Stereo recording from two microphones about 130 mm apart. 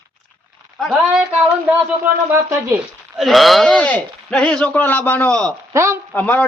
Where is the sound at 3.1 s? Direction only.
Centre (ahead or behind).